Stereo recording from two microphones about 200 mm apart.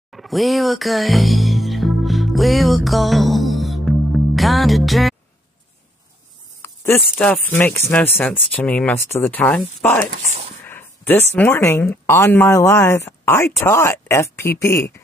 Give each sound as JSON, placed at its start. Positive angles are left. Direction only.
{"t": 0.1, "sound": "music", "side_deg": 0}
{"t": 6.6, "sound": "a sound", "side_deg": 10}
{"t": 7.2, "sound": "speech", "side_deg": 10}
{"t": 10.1, "sound": "speech", "side_deg": -35}
{"t": 10.6, "sound": "speech", "side_deg": 10}